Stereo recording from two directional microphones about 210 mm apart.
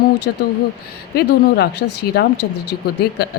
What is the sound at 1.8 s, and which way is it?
Speech, 50° left (ahead or behind).